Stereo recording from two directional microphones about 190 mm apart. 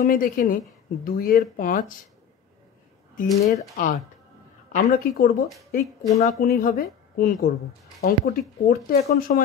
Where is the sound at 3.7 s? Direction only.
45° left (ahead or behind).